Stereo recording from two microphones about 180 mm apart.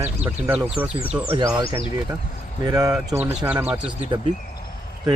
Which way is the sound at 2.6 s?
20° right (ahead or behind).